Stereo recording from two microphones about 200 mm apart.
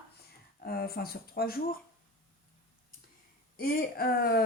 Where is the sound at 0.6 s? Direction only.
50° left (ahead or behind).